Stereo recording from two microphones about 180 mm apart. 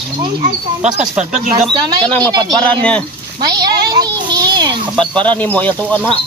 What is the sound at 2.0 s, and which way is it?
Speech, 5° left (ahead or behind).